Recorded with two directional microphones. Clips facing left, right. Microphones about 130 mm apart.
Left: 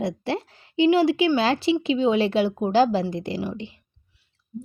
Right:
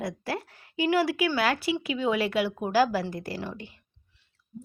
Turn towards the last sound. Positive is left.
turn(degrees=20)  # may be behind; listen again after turning